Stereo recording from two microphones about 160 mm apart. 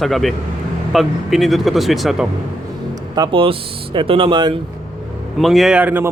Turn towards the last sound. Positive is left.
turn(degrees=-10)  # may be behind; listen again after turning